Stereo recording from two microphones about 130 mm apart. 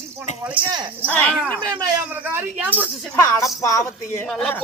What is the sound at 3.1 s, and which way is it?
Music, 25° left (ahead or behind).